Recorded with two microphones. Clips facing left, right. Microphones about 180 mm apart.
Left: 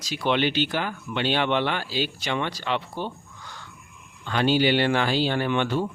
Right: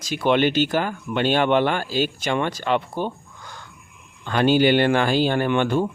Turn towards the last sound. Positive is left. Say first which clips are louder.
# right 4 dB
turn(degrees=-50)  # may be behind; listen again after turning